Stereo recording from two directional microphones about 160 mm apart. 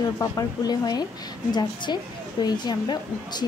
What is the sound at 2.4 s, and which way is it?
A woman's voice, 25° left (ahead or behind).